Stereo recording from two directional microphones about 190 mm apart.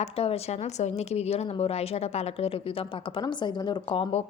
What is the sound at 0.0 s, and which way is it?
A woman's voice, 30° left (ahead or behind).